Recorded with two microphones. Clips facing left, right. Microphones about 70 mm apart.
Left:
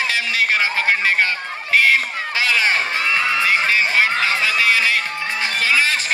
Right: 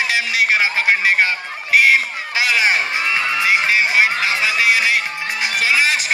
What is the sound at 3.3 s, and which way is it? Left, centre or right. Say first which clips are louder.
Music: right 4 dB; centre.